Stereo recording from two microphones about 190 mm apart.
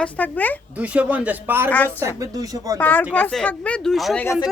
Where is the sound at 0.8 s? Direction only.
5° right (ahead or behind).